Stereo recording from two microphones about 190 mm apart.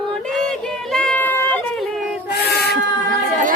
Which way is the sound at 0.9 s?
5° left (ahead or behind).